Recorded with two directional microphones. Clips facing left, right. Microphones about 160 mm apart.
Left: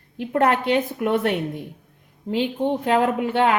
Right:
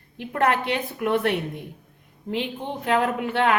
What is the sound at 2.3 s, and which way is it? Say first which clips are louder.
A woman's voice: left 7 dB; 30° left (ahead or behind).